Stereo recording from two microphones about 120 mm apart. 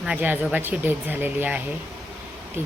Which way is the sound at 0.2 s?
15° right (ahead or behind).